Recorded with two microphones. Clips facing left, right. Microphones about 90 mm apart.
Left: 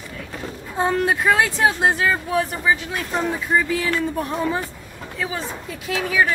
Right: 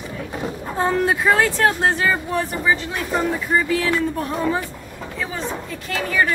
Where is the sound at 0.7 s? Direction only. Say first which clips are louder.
Even; 5° left (ahead or behind).